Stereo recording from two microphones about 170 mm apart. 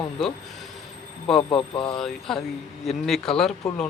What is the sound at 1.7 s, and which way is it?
Speech, 30° left (ahead or behind).